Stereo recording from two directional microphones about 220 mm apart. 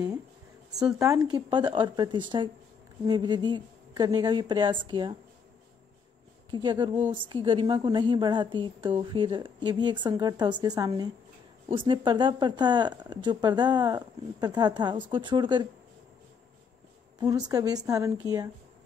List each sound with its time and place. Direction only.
0.9 s speech: 15° right (ahead or behind)
6.5 s speech: 20° right (ahead or behind)
17.2 s a woman's voice: 15° right (ahead or behind)